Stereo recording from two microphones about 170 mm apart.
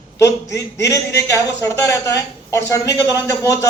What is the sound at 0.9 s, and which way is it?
A woman's voice, 20° left (ahead or behind).